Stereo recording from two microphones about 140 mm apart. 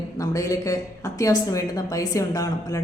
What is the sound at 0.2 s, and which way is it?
A woman's voice, 25° left (ahead or behind).